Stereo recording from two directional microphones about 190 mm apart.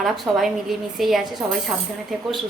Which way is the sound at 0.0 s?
Centre (ahead or behind).